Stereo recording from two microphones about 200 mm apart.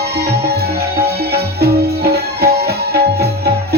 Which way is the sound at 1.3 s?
55° right (ahead or behind).